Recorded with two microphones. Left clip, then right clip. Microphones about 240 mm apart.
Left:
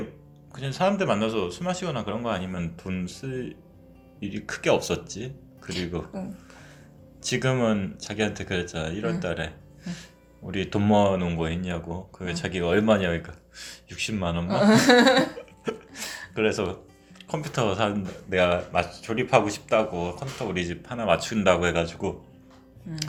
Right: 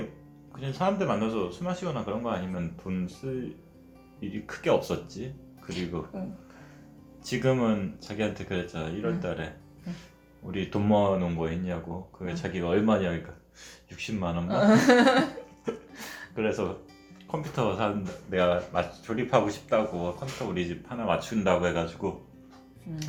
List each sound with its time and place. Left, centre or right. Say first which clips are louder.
0.5 s speech: left 4 dB; left
7.3 s speech: left 2 dB; left
14.6 s speech: left 3 dB; left
15.6 s speech: left 4 dB; left